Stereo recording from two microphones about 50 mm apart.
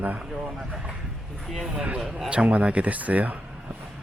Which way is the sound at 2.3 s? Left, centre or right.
Right.